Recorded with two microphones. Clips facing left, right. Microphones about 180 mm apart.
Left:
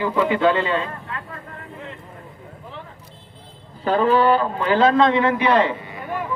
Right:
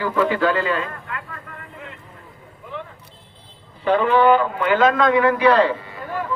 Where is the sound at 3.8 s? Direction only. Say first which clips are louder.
Right 1 dB; 35° left (ahead or behind).